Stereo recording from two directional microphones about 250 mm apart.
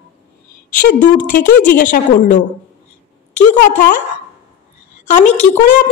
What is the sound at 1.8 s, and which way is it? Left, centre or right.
Speech, left.